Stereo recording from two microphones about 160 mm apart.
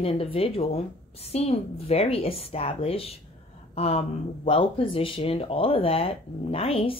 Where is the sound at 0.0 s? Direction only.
35° left (ahead or behind).